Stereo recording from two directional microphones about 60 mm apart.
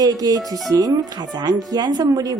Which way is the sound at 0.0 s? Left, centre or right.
Right.